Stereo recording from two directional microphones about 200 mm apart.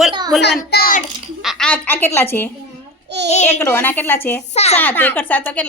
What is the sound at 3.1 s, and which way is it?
Speech, 55° right (ahead or behind).